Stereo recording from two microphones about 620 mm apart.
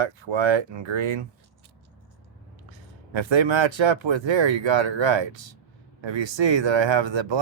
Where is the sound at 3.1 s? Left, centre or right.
Right.